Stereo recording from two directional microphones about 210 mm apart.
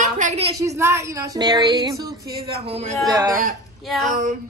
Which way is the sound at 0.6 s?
15° right (ahead or behind).